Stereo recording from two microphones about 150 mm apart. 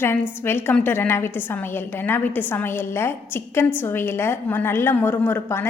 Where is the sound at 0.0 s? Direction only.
15° left (ahead or behind).